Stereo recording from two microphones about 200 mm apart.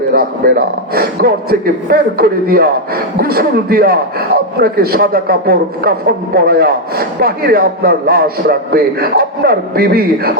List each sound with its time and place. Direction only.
0.1 s a man's voice: 45° right (ahead or behind)